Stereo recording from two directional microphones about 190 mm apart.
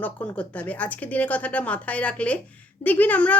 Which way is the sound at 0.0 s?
5° left (ahead or behind).